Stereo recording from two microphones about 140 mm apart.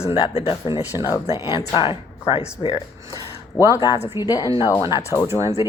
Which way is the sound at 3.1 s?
25° left (ahead or behind).